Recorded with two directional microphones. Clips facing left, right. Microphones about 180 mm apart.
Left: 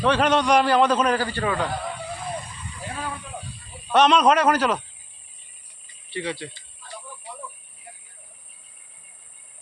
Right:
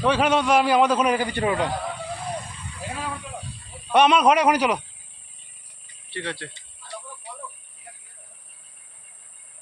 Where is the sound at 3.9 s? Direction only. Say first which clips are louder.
Even; 10° right (ahead or behind).